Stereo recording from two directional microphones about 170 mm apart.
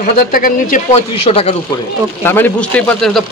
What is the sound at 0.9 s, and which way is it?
Speech, 35° left (ahead or behind).